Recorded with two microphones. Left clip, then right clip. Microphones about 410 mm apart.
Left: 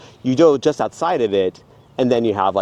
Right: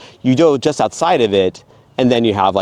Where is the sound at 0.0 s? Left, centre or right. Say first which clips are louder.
Right 1 dB; right.